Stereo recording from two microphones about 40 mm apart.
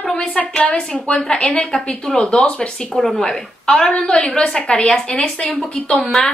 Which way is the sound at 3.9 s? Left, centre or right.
Left.